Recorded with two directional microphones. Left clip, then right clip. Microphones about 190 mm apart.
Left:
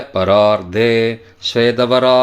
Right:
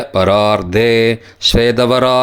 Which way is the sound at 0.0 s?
35° right (ahead or behind).